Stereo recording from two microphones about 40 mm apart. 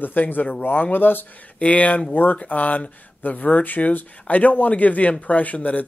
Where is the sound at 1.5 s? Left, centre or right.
Left.